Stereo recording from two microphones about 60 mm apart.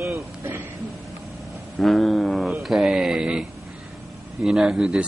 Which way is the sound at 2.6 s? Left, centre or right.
Centre.